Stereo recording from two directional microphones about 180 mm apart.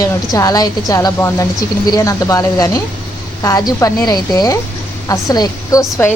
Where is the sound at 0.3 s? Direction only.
20° left (ahead or behind).